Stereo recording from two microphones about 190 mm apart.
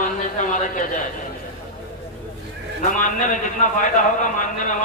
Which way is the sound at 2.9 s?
45° left (ahead or behind).